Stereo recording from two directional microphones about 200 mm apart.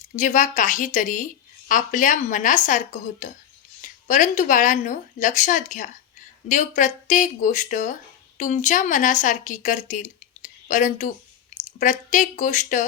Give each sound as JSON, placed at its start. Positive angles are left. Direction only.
{"t": 0.2, "sound": "speech", "side_deg": 40}